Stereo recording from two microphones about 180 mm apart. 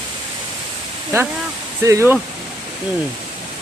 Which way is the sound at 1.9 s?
15° right (ahead or behind).